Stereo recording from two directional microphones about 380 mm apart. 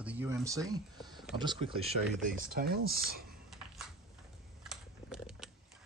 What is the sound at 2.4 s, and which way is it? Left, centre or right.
Speech, right.